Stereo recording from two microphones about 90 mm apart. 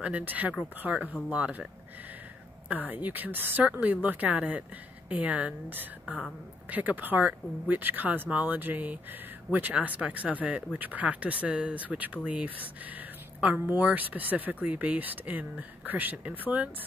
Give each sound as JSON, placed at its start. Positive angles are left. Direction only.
{"t": 0.0, "sound": "speech", "side_deg": -15}
{"t": 2.7, "sound": "speech", "side_deg": -15}